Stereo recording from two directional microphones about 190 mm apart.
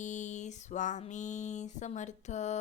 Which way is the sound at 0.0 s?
40° left (ahead or behind).